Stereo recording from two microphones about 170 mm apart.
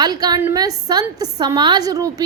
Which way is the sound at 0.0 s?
25° right (ahead or behind).